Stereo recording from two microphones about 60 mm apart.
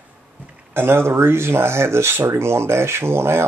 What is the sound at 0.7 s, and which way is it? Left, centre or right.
Speech, right.